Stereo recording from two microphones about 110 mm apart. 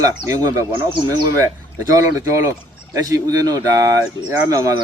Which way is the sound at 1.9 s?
30° right (ahead or behind).